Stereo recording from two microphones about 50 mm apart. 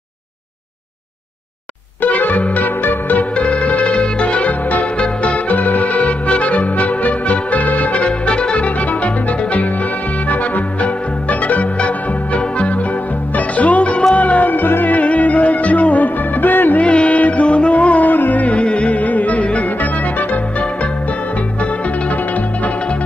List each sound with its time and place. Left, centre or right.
2.0 s music: left
3.3 s music: left
13.6 s music: left
16.8 s music: left